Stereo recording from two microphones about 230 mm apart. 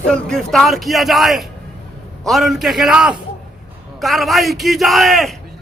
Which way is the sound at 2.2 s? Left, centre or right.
Centre.